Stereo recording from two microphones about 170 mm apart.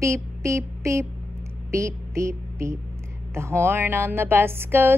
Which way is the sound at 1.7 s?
15° right (ahead or behind).